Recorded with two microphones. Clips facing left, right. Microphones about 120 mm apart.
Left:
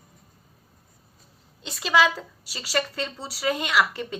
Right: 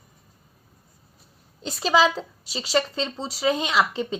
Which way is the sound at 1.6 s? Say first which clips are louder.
Right 2 dB; 40° right (ahead or behind).